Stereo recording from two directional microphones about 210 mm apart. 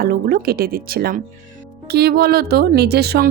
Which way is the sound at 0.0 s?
45° right (ahead or behind).